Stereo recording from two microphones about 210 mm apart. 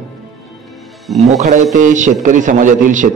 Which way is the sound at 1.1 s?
35° right (ahead or behind).